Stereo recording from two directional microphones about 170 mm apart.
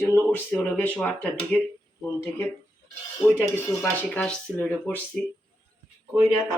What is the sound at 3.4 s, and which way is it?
Speech, 10° left (ahead or behind).